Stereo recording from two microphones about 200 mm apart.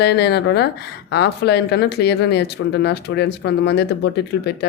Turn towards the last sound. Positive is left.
turn(degrees=55)  # may be behind; listen again after turning